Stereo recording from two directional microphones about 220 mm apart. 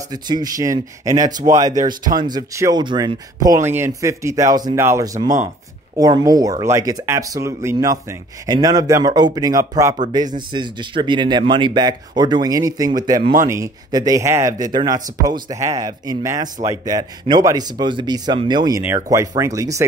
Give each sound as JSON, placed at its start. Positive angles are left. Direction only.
{"t": 0.1, "sound": "speech", "side_deg": -15}